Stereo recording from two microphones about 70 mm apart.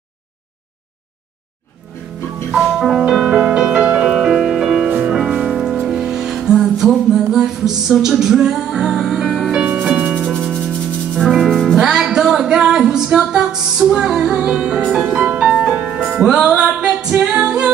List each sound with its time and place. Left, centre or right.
2.5 s music: centre
10.1 s music: centre